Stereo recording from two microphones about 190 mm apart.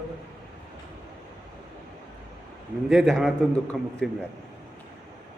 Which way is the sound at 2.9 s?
Centre (ahead or behind).